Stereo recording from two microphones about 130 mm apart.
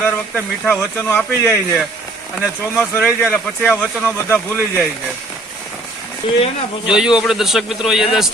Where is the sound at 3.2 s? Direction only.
15° left (ahead or behind).